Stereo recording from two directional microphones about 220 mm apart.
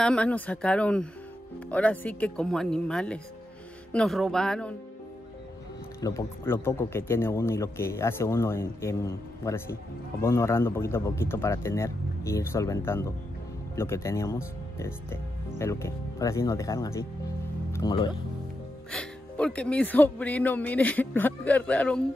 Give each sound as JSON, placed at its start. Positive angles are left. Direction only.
{"t": 0.0, "sound": "speech", "side_deg": 5}
{"t": 5.9, "sound": "speech", "side_deg": 15}
{"t": 18.9, "sound": "speech", "side_deg": 5}